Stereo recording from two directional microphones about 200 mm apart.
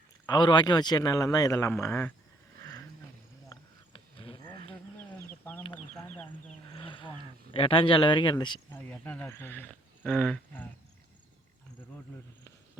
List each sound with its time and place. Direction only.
0.3 s speech: 20° left (ahead or behind)
3.5 s a sound: 25° left (ahead or behind)
5.3 s chicken: 10° left (ahead or behind)
5.6 s chicken: 25° left (ahead or behind)
6.7 s wild animals: 25° left (ahead or behind)
7.5 s speech: 25° left (ahead or behind)
8.7 s speech: 10° left (ahead or behind)